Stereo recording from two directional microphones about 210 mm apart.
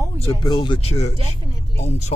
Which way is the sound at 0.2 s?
20° left (ahead or behind).